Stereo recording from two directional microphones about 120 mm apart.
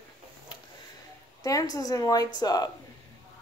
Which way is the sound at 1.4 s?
30° left (ahead or behind).